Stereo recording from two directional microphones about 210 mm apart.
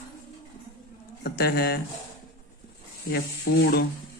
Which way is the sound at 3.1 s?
50° left (ahead or behind).